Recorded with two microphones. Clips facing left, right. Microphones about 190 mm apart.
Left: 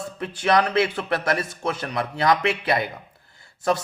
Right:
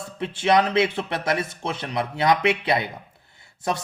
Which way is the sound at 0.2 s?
25° right (ahead or behind).